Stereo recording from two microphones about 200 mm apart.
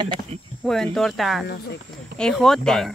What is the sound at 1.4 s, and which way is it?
Speech, 55° left (ahead or behind).